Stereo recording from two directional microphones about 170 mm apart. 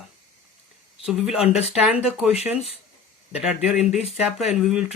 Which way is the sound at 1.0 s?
5° right (ahead or behind).